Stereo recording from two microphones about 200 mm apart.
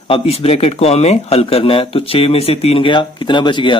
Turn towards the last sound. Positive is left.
turn(degrees=25)  # may be behind; listen again after turning